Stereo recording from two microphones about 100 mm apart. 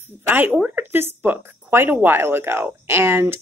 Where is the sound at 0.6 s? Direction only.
15° right (ahead or behind).